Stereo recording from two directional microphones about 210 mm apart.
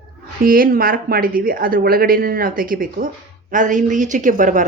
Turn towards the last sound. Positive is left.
turn(degrees=-40)  # may be behind; listen again after turning